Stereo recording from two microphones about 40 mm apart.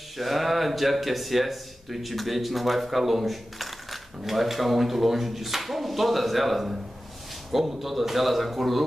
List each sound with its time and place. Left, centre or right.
0.2 s speech: centre
7.8 s speech: centre